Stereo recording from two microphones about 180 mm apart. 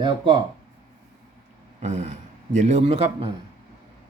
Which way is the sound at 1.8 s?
40° right (ahead or behind).